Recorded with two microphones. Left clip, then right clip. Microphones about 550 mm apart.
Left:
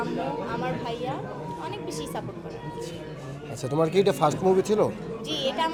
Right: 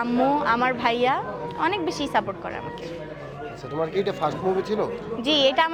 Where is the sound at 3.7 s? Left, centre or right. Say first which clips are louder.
Left 3 dB; left.